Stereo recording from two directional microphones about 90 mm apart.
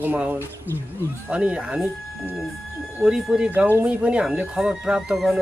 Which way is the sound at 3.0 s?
10° right (ahead or behind).